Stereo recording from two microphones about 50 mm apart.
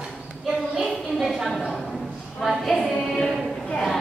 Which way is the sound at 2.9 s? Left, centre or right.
Centre.